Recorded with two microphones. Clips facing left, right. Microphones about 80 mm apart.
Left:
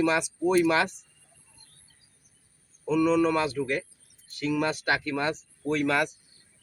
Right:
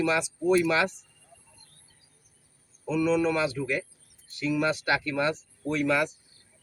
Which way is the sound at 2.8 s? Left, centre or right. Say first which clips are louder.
Left 2 dB; left.